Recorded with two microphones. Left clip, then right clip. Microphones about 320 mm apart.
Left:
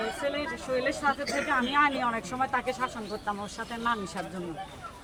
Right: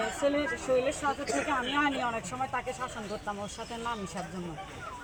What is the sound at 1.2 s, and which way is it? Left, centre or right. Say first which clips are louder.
Speech: left 2 dB; centre.